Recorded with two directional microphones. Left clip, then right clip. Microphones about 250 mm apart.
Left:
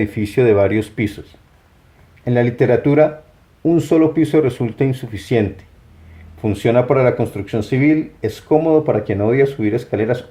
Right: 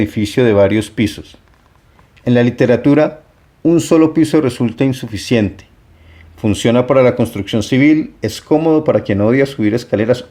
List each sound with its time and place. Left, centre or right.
0.0 s speech: right